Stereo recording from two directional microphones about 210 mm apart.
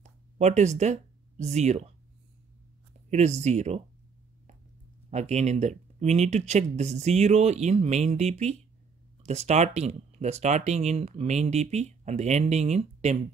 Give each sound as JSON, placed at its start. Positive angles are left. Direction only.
{"t": 0.0, "sound": "a sound", "side_deg": -35}
{"t": 1.4, "sound": "speech", "side_deg": -30}
{"t": 3.1, "sound": "speech", "side_deg": -30}
{"t": 5.1, "sound": "speech", "side_deg": -30}